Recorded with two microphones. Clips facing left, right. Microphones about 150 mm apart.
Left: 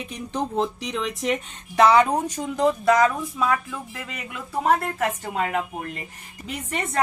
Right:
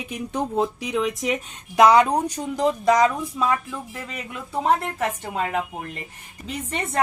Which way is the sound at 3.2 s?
Centre (ahead or behind).